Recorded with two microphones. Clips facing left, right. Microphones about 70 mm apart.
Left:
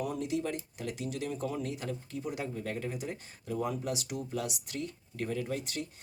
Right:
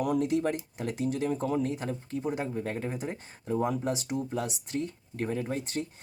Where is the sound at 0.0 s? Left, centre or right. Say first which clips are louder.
Right 6 dB; right.